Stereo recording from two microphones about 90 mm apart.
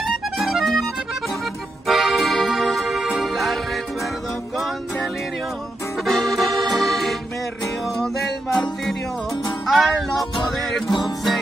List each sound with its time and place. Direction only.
0.0 s accordion: centre (ahead or behind)
1.9 s accordion: centre (ahead or behind)
3.2 s music: centre (ahead or behind)
6.0 s accordion: centre (ahead or behind)
7.8 s music: centre (ahead or behind)
9.7 s music: centre (ahead or behind)
10.9 s music: 55° left (ahead or behind)